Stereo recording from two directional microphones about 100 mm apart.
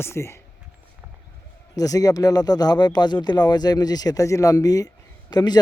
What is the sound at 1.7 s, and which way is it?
A man's voice, 35° left (ahead or behind).